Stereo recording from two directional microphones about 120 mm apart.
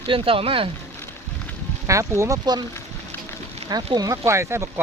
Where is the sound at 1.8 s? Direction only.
25° right (ahead or behind).